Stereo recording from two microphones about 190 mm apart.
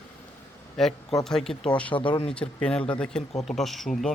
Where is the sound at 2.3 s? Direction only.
5° left (ahead or behind).